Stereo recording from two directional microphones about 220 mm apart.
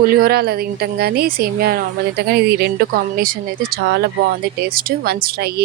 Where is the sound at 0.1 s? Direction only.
45° right (ahead or behind).